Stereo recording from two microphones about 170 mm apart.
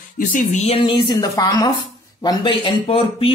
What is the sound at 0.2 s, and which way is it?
Speech, 50° left (ahead or behind).